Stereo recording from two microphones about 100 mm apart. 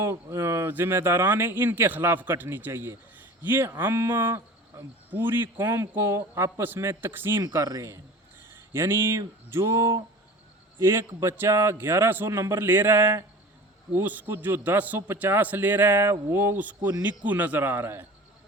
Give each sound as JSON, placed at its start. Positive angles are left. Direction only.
{"t": 0.0, "sound": "speech", "side_deg": -30}
{"t": 7.5, "sound": "speech", "side_deg": -30}